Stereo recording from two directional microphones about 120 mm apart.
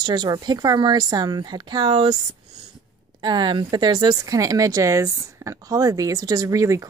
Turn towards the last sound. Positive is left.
turn(degrees=-25)  # may be behind; listen again after turning